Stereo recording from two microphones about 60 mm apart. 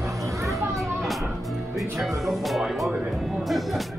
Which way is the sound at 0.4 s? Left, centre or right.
Right.